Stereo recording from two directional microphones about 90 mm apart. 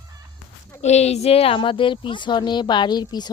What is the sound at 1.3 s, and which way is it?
Speech, 90° left.